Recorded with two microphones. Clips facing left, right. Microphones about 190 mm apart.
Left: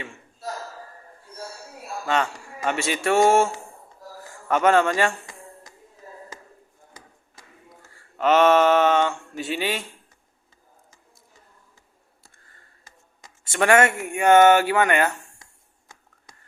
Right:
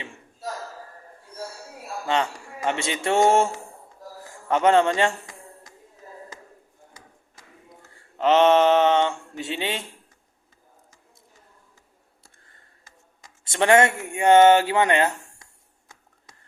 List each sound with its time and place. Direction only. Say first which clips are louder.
2.0 s speech: even; 20° right (ahead or behind)
8.1 s speech: even; 20° right (ahead or behind)
13.5 s speech: even; 20° right (ahead or behind)